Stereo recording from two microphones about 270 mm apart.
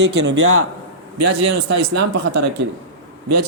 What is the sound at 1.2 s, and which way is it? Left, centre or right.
Speech, right.